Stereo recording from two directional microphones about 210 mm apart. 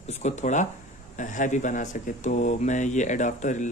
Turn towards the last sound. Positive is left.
turn(degrees=35)  # may be behind; listen again after turning